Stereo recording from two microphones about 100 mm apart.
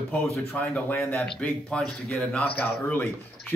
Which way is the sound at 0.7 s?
15° left (ahead or behind).